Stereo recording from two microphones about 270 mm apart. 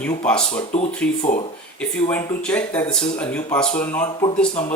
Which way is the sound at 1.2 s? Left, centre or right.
Left.